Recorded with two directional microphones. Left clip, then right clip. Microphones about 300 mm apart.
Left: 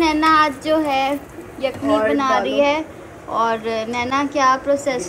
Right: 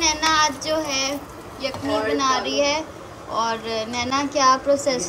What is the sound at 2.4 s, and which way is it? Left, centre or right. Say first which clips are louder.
A woman's voice: left 4 dB; centre.